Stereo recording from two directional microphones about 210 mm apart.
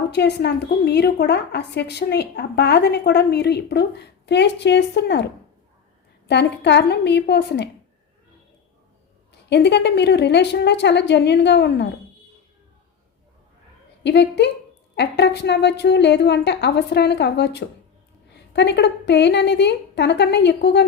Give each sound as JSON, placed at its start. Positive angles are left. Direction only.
{"t": 0.1, "sound": "a woman's voice", "side_deg": 55}
{"t": 6.2, "sound": "a woman's voice", "side_deg": 55}
{"t": 9.5, "sound": "a woman's voice", "side_deg": 55}
{"t": 14.0, "sound": "a woman's voice", "side_deg": 55}